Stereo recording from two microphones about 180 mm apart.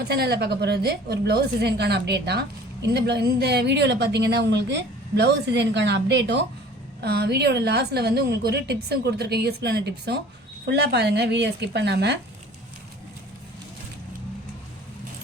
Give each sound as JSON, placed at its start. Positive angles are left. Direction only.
{"t": 0.0, "sound": "a woman's voice", "side_deg": -65}
{"t": 7.0, "sound": "a woman's voice", "side_deg": -60}